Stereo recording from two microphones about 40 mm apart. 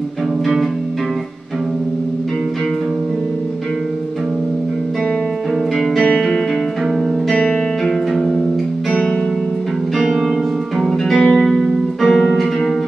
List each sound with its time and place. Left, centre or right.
6.1 s music: centre
9.9 s music: centre